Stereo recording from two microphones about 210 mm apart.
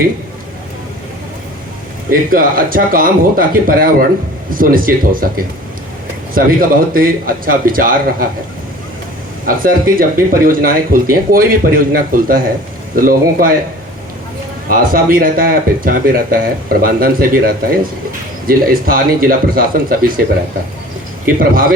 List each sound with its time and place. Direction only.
2.0 s speech: 40° right (ahead or behind)
9.5 s speech: 45° right (ahead or behind)
14.7 s speech: 45° right (ahead or behind)
21.2 s speech: 45° right (ahead or behind)